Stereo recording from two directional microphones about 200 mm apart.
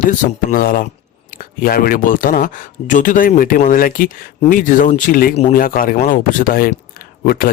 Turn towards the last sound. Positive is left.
turn(degrees=45)  # may be behind; listen again after turning